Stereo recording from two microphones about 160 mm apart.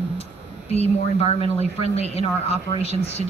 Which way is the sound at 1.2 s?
40° left (ahead or behind).